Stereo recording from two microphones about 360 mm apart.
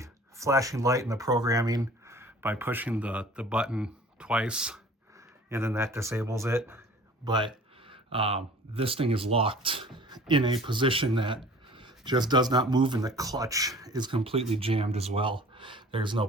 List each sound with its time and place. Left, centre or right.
0.0 s speech: centre